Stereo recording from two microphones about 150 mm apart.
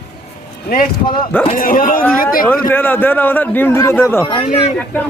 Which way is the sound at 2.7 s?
15° left (ahead or behind).